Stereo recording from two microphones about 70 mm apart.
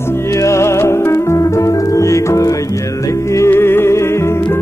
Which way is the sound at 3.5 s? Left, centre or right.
Left.